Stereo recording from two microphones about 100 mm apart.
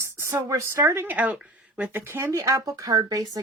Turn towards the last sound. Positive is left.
turn(degrees=-35)  # may be behind; listen again after turning